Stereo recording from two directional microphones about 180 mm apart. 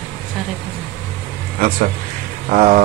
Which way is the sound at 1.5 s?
50° right (ahead or behind).